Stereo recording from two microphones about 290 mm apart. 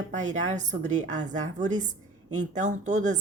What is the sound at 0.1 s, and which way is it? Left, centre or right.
A woman's voice, right.